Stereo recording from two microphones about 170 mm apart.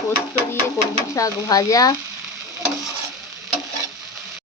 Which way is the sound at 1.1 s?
20° left (ahead or behind).